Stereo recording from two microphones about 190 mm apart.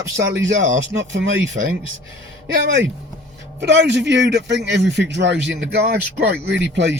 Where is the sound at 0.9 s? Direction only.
70° right (ahead or behind).